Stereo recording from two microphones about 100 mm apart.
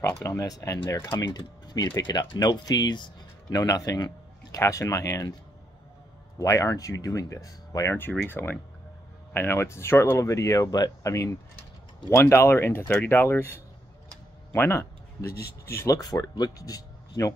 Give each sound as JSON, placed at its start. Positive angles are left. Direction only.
{"t": 0.1, "sound": "speech", "side_deg": 30}
{"t": 6.3, "sound": "speech", "side_deg": 35}
{"t": 16.0, "sound": "speech", "side_deg": 40}